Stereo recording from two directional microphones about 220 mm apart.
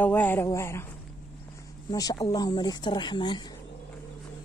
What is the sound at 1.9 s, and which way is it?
Speech, 15° left (ahead or behind).